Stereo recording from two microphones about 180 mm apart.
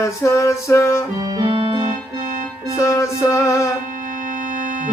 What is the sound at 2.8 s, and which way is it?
Music, 15° left (ahead or behind).